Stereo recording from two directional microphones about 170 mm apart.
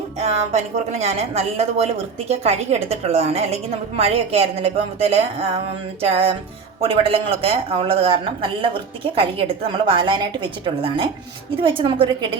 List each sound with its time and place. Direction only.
0.2 s a woman's voice: 40° right (ahead or behind)